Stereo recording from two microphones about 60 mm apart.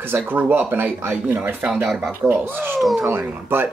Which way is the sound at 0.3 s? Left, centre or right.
Right.